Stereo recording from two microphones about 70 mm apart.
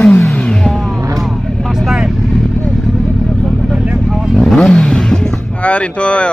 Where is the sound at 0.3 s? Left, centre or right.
Centre.